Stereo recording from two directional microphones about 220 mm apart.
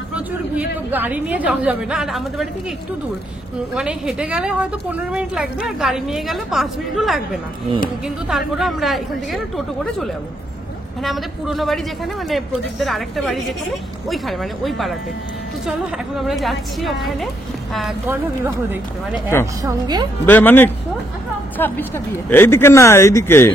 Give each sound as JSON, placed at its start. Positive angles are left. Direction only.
{"t": 0.1, "sound": "a woman's voice", "side_deg": -5}
{"t": 3.7, "sound": "a woman's voice", "side_deg": -5}
{"t": 8.3, "sound": "a woman's voice", "side_deg": 0}
{"t": 11.0, "sound": "a woman's voice", "side_deg": 0}
{"t": 16.2, "sound": "a woman's voice", "side_deg": 0}
{"t": 20.2, "sound": "speech", "side_deg": 10}